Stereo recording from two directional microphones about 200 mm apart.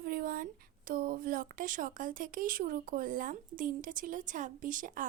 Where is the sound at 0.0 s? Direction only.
45° right (ahead or behind).